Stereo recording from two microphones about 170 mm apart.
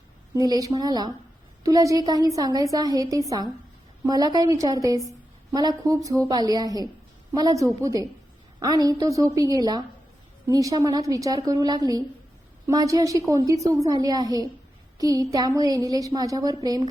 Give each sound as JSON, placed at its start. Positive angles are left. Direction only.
{"t": 0.3, "sound": "a woman's voice", "side_deg": -20}